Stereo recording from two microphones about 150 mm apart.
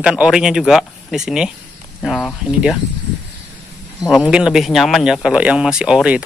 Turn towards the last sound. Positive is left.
turn(degrees=-5)  # may be behind; listen again after turning